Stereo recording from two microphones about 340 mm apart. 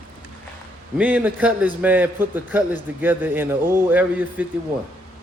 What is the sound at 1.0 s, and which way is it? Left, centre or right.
A man's voice, centre.